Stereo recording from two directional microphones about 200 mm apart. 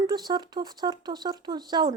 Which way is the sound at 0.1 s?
20° right (ahead or behind).